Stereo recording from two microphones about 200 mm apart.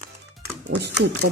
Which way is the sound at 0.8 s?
55° right (ahead or behind).